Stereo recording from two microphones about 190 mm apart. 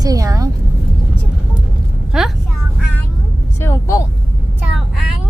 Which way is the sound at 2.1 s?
Centre (ahead or behind).